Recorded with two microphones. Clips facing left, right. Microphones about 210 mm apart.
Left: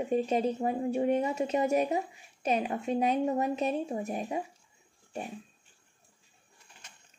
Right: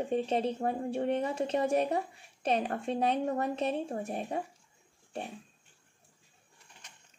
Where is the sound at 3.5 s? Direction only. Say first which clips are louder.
Left 2 dB; 30° right (ahead or behind).